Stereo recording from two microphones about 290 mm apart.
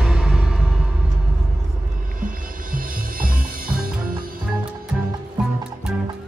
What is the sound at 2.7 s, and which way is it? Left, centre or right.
Music, right.